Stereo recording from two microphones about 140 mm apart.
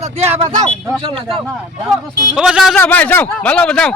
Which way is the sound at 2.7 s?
10° left (ahead or behind).